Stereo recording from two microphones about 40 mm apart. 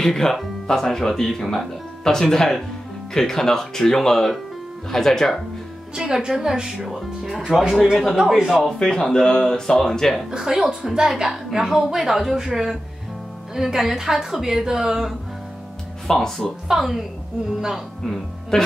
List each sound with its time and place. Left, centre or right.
0.0 s speech: centre
5.9 s a woman's voice: centre
6.9 s a woman's voice: centre
8.6 s speech: centre
10.3 s a woman's voice: centre
16.1 s speech: centre
16.6 s a woman's voice: centre
18.5 s speech: centre